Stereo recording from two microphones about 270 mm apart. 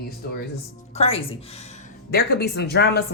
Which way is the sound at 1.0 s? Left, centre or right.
Left.